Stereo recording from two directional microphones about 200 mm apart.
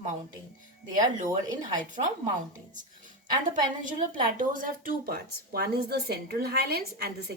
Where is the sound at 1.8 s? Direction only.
40° right (ahead or behind).